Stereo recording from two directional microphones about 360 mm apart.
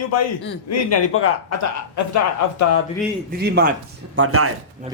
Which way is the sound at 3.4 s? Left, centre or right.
Right.